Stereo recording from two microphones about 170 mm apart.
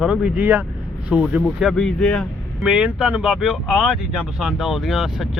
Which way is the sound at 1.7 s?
5° left (ahead or behind).